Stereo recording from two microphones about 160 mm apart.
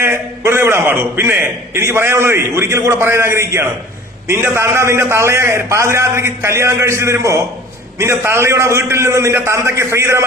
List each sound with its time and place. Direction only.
0.0 s a man's voice: 15° right (ahead or behind)